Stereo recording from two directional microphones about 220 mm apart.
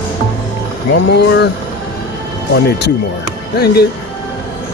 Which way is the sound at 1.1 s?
50° left (ahead or behind).